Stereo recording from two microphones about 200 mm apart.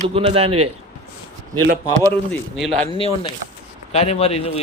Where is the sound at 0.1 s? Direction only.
30° right (ahead or behind).